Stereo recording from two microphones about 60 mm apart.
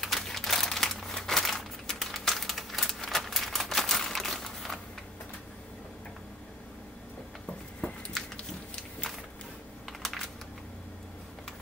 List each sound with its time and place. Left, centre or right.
0.0 s crumpling: centre
7.8 s biting: centre
10.0 s a sound: centre